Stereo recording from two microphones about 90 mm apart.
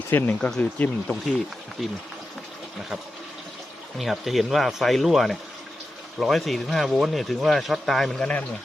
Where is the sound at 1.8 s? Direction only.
Centre (ahead or behind).